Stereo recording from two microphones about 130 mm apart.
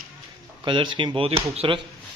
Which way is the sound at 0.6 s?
40° right (ahead or behind).